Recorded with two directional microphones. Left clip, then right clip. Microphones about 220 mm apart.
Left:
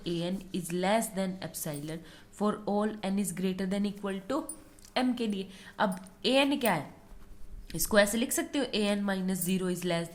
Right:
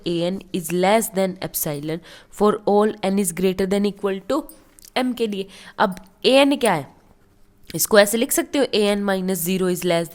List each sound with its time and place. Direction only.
0.0 s a woman's voice: 45° right (ahead or behind)